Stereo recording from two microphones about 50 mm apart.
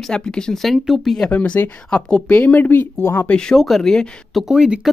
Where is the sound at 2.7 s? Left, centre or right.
Left.